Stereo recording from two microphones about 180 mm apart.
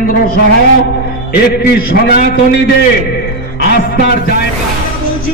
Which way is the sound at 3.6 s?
60° left (ahead or behind).